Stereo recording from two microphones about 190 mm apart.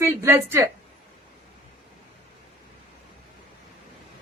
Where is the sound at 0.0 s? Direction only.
15° right (ahead or behind).